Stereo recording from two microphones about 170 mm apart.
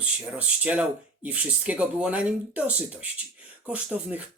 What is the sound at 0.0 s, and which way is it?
Speech, 10° right (ahead or behind).